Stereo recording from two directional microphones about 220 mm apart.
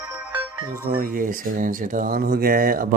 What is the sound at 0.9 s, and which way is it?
Speech, 40° right (ahead or behind).